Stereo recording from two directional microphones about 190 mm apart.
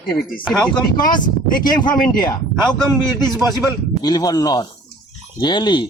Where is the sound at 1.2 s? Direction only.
45° left (ahead or behind).